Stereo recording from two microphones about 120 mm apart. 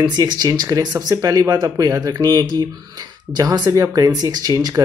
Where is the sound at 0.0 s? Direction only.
35° right (ahead or behind).